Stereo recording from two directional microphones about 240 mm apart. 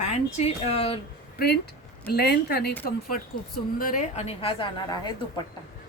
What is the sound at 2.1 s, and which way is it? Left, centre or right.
Speech, left.